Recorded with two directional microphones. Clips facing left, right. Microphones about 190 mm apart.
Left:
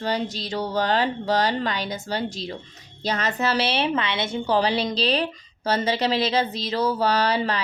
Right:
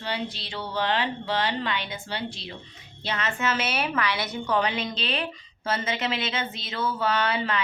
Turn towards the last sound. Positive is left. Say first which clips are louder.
# left 4 dB
turn(degrees=35)  # may be behind; listen again after turning